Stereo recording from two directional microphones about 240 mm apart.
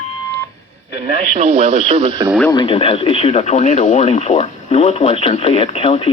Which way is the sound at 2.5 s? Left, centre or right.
Left.